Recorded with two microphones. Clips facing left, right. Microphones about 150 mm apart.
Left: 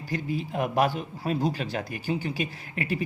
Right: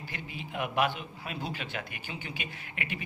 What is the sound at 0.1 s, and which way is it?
A man's voice, 40° left (ahead or behind).